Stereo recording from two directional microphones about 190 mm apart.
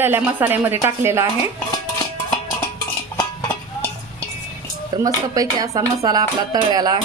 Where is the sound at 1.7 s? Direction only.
20° left (ahead or behind).